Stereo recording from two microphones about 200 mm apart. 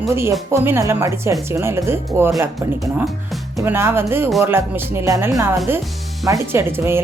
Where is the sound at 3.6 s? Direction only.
10° right (ahead or behind).